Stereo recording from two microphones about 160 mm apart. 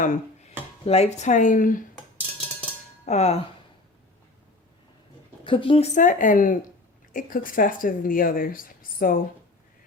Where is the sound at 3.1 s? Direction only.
40° left (ahead or behind).